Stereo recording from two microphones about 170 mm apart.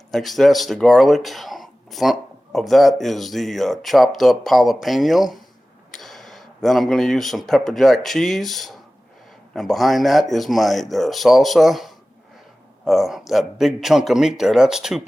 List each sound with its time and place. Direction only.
0.1 s speech: centre (ahead or behind)